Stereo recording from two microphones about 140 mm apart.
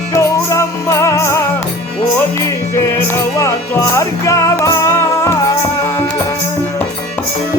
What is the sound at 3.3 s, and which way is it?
Music, 20° left (ahead or behind).